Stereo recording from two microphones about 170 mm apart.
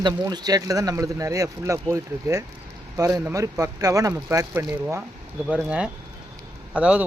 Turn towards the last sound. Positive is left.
turn(degrees=-5)  # may be behind; listen again after turning